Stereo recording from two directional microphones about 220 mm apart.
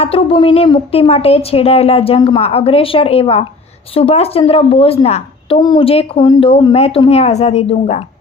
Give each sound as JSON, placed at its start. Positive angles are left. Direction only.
{"t": 0.0, "sound": "a woman's voice", "side_deg": 25}